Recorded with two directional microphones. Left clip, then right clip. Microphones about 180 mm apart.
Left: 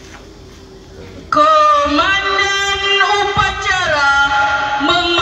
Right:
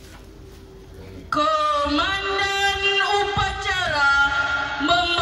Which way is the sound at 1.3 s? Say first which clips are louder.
Left 10 dB; 25° right (ahead or behind).